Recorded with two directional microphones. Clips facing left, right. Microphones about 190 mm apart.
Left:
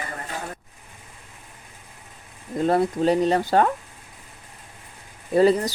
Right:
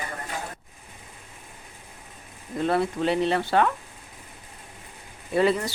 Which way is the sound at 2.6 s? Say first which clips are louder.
Left 4 dB; 40° left (ahead or behind).